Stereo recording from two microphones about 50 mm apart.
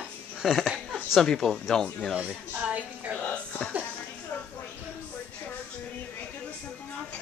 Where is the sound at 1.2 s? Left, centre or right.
Centre.